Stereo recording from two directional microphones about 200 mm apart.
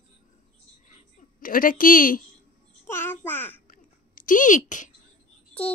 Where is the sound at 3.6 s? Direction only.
40° left (ahead or behind).